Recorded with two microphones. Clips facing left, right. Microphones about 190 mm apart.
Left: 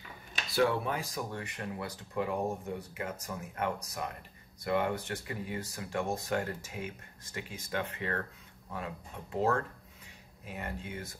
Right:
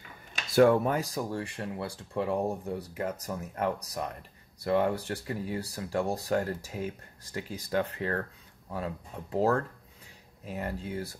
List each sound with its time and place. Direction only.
0.5 s speech: 50° right (ahead or behind)